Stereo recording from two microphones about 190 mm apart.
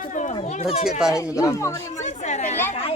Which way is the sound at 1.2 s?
15° left (ahead or behind).